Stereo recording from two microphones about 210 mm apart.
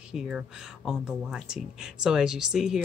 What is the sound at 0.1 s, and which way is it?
Speech, 5° right (ahead or behind).